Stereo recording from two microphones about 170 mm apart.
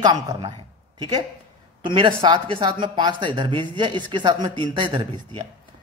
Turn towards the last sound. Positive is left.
turn(degrees=-25)  # may be behind; listen again after turning